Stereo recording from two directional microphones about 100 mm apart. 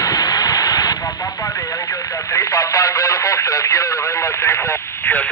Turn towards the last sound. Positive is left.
turn(degrees=30)  # may be behind; listen again after turning